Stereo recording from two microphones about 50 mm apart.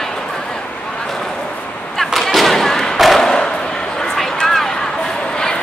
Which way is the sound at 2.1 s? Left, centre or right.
Centre.